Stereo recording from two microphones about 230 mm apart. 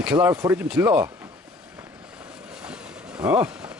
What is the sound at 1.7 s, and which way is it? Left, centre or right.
Vehicle, centre.